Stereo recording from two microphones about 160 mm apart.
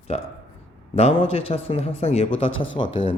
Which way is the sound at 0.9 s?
40° left (ahead or behind).